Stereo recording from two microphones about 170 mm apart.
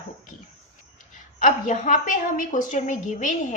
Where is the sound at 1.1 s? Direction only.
50° left (ahead or behind).